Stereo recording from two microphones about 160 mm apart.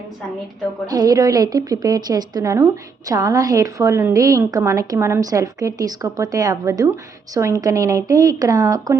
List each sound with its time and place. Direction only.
0.9 s a woman's voice: 25° right (ahead or behind)